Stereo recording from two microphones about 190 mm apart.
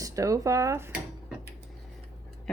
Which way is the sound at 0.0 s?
15° right (ahead or behind).